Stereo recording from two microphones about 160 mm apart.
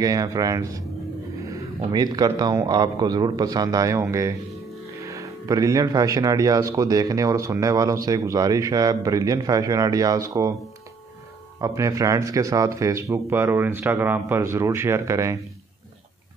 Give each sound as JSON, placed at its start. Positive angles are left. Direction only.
{"t": 0.0, "sound": "speech", "side_deg": -20}
{"t": 1.9, "sound": "speech", "side_deg": -25}
{"t": 11.6, "sound": "speech", "side_deg": -20}